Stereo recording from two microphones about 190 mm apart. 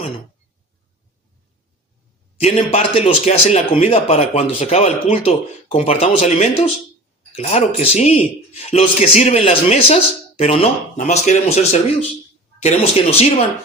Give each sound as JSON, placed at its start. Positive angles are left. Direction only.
{"t": 2.4, "sound": "speech", "side_deg": 35}